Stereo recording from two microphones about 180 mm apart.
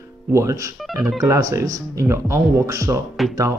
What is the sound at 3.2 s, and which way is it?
Speech, centre (ahead or behind).